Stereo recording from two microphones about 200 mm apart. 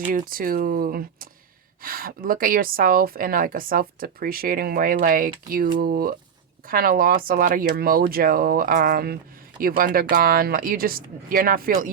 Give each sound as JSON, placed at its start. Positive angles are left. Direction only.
{"t": 0.1, "sound": "a woman's voice", "side_deg": -45}